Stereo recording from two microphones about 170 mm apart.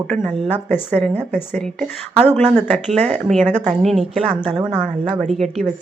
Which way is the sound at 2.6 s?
40° right (ahead or behind).